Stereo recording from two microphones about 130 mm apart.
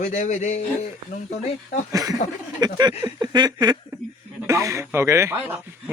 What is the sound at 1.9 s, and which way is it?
Speech, 25° right (ahead or behind).